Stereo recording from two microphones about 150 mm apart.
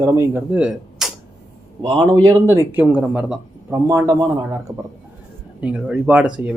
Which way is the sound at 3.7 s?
20° right (ahead or behind).